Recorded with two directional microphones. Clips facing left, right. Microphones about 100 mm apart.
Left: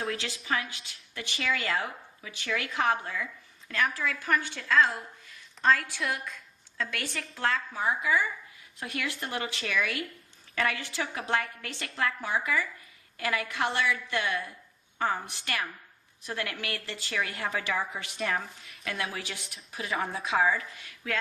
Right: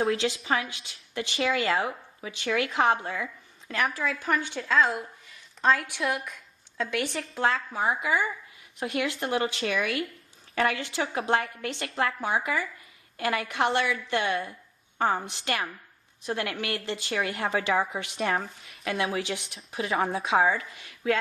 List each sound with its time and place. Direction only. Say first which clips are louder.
0.2 s a woman's voice: right 5 dB; 25° right (ahead or behind)
6.2 s a sound: even; 15° right (ahead or behind)
7.4 s a woman's voice: right 3 dB; 20° right (ahead or behind)
9.2 s a woman's voice: right 7 dB; 35° right (ahead or behind)
11.6 s a woman's voice: right 3 dB; 20° right (ahead or behind)
19.7 s a woman's voice: right 5 dB; 30° right (ahead or behind)